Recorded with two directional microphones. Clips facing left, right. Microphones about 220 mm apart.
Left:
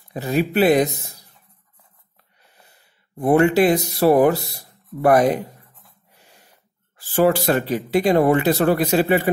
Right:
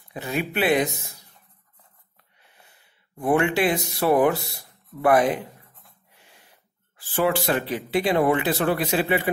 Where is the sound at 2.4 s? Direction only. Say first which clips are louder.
Left 2 dB; 40° left (ahead or behind).